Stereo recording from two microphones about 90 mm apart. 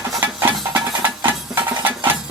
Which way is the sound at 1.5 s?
20° right (ahead or behind).